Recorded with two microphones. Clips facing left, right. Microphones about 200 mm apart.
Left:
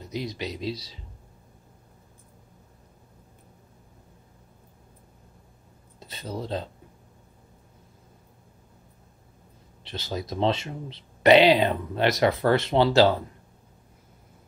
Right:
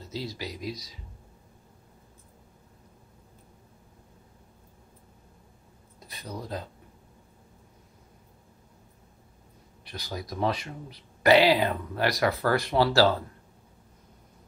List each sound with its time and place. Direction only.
0.0 s speech: 20° left (ahead or behind)
5.9 s speech: 25° left (ahead or behind)
9.8 s speech: 25° left (ahead or behind)